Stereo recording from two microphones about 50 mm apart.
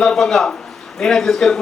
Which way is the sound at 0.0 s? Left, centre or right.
Centre.